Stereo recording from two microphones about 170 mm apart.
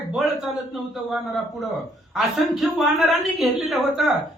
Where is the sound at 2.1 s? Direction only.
Centre (ahead or behind).